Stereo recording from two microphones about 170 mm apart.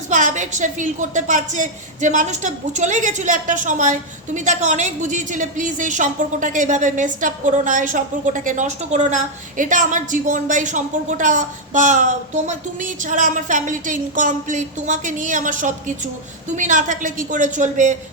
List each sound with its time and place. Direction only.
0.1 s a woman's voice: 45° right (ahead or behind)